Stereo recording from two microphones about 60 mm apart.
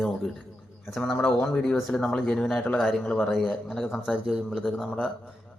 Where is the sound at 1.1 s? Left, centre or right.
Centre.